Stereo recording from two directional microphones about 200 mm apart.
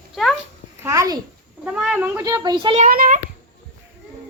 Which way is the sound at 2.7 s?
40° right (ahead or behind).